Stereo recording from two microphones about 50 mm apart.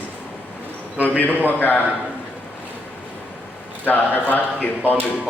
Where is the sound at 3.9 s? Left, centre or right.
Left.